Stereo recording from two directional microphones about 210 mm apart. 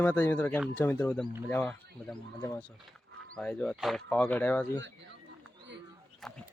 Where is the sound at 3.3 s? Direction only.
5° left (ahead or behind).